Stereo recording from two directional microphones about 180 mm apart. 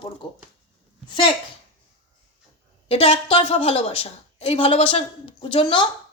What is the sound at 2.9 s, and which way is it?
A woman's voice, 35° left (ahead or behind).